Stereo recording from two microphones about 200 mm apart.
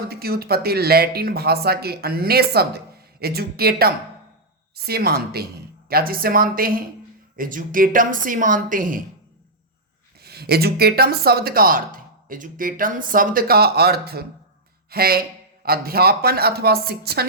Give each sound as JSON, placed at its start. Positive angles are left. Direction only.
{"t": 0.1, "sound": "speech", "side_deg": -50}
{"t": 10.2, "sound": "speech", "side_deg": -55}